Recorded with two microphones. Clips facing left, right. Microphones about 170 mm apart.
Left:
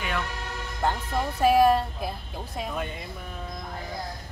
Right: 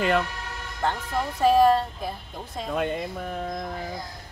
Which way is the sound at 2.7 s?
70° right (ahead or behind).